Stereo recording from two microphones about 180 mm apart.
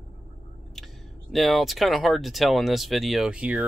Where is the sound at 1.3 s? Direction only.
Centre (ahead or behind).